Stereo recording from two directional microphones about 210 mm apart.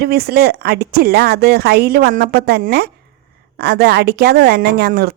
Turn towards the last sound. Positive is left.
turn(degrees=-50)  # may be behind; listen again after turning